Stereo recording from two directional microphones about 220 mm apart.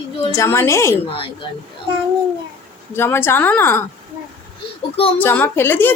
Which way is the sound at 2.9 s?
10° left (ahead or behind).